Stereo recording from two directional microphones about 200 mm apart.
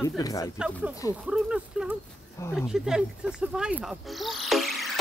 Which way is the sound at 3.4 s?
5° right (ahead or behind).